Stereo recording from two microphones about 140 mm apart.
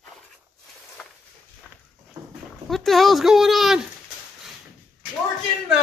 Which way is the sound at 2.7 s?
Centre (ahead or behind).